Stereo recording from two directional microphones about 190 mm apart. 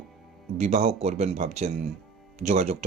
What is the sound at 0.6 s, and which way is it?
A man's voice, 35° right (ahead or behind).